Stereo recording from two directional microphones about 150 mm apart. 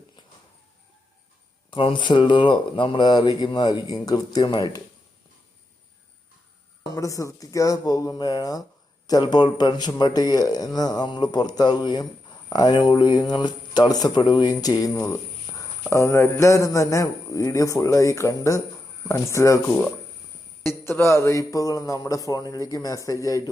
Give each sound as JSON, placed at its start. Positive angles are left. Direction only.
{"t": 1.7, "sound": "speech", "side_deg": 35}
{"t": 6.9, "sound": "speech", "side_deg": 20}
{"t": 20.7, "sound": "speech", "side_deg": 15}